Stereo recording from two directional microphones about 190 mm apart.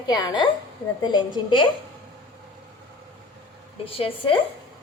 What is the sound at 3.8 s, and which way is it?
Speech, 30° left (ahead or behind).